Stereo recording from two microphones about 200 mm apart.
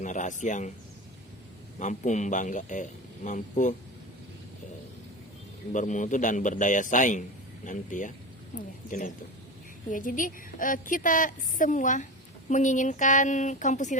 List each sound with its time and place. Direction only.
0.0 s a man's voice: 40° left (ahead or behind)
1.8 s a man's voice: 35° left (ahead or behind)
5.7 s a man's voice: 40° left (ahead or behind)